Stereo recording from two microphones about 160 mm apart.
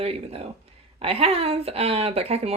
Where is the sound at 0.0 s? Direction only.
35° right (ahead or behind).